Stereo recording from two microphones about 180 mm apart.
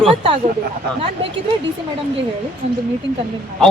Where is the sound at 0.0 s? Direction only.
30° right (ahead or behind).